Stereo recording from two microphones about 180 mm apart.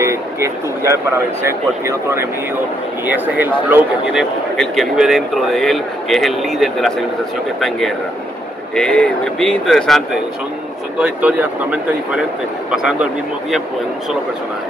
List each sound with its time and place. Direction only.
0.0 s speech: 15° right (ahead or behind); by 6.9 s centre (ahead or behind)
8.7 s speech: 5° left (ahead or behind)